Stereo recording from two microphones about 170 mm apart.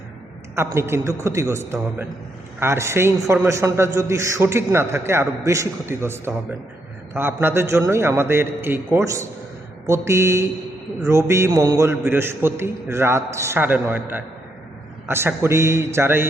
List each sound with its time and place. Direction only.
0.5 s a man's voice: 15° right (ahead or behind)